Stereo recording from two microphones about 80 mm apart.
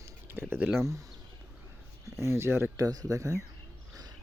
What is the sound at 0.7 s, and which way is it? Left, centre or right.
Speech, right.